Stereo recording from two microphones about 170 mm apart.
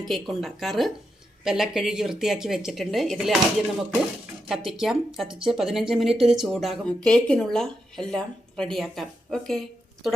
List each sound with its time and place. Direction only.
0.0 s speech: centre (ahead or behind)
4.4 s speech: centre (ahead or behind)